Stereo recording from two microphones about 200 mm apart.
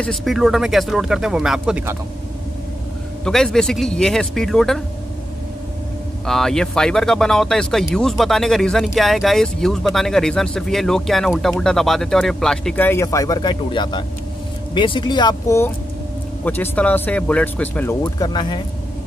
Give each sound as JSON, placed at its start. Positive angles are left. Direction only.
{"t": 0.0, "sound": "speech", "side_deg": 0}
{"t": 3.3, "sound": "speech", "side_deg": 5}
{"t": 6.2, "sound": "speech", "side_deg": 0}
{"t": 18.0, "sound": "speech", "side_deg": 20}